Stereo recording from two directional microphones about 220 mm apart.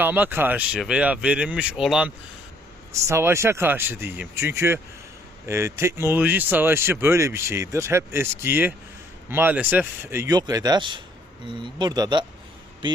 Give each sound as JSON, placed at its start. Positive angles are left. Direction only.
{"t": 0.0, "sound": "speech", "side_deg": -10}